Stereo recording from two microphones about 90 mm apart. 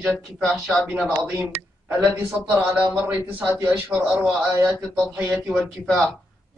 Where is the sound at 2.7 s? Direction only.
15° right (ahead or behind).